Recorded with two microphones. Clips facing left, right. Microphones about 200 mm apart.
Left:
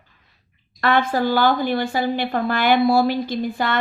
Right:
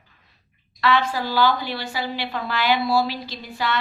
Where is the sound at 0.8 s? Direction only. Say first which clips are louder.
Left 3 dB; 50° left (ahead or behind).